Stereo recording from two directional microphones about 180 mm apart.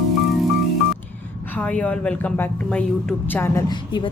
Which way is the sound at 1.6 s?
5° left (ahead or behind).